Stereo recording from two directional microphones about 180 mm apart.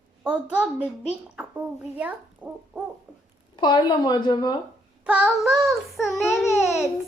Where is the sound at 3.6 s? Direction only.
25° left (ahead or behind).